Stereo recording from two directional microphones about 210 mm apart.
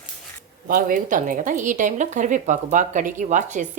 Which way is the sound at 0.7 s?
40° right (ahead or behind).